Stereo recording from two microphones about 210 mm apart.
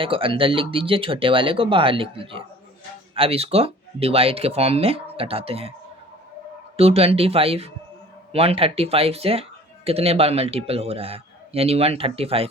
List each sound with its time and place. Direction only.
0.0 s speech: 25° right (ahead or behind)
6.7 s speech: 30° right (ahead or behind)